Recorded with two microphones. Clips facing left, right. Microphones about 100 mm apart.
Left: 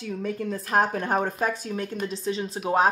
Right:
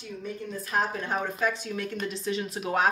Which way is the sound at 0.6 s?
55° left (ahead or behind).